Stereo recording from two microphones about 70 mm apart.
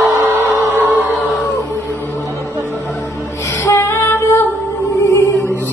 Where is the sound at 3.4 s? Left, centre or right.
Left.